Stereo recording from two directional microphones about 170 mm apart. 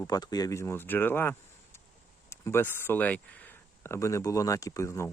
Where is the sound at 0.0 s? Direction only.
25° left (ahead or behind).